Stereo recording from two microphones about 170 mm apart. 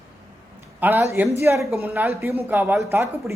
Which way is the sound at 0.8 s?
15° right (ahead or behind).